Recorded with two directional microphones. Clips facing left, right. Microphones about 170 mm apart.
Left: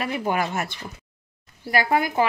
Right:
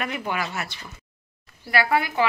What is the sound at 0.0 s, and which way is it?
Speech, 30° left (ahead or behind).